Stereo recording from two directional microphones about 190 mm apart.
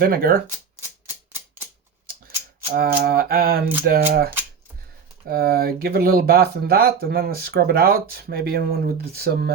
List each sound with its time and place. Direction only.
0.0 s speech: 50° right (ahead or behind)
0.8 s typewriter: 10° right (ahead or behind)
2.7 s speech: 50° right (ahead or behind)
5.3 s speech: 50° right (ahead or behind)